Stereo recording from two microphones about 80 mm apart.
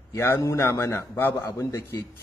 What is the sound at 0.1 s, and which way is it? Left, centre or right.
A man's voice, left.